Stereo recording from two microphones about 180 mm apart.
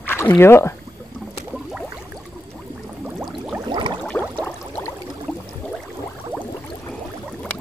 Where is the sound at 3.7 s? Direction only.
25° right (ahead or behind).